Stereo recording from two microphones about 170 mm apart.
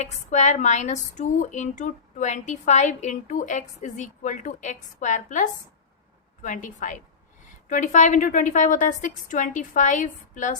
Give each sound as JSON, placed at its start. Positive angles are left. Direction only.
{"t": 0.0, "sound": "a woman's voice", "side_deg": 45}